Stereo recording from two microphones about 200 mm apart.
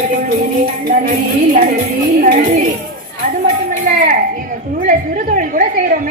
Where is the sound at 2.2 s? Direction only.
40° right (ahead or behind).